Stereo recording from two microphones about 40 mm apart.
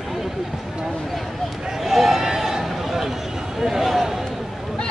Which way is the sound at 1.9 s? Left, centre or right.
Centre.